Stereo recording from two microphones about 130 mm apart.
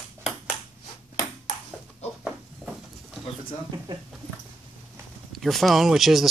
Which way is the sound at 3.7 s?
35° right (ahead or behind).